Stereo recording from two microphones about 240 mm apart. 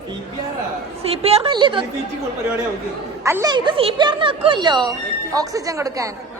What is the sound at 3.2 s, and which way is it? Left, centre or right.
A woman's voice, centre.